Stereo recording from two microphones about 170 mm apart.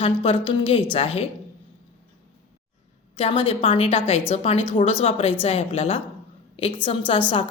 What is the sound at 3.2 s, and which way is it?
A woman's voice, 35° left (ahead or behind).